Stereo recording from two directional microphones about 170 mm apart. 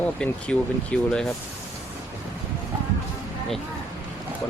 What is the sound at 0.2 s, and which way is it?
Speech, 5° left (ahead or behind).